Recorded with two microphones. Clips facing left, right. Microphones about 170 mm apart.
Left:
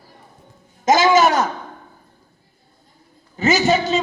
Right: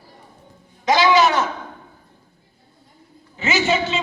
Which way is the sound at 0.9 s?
45° left (ahead or behind).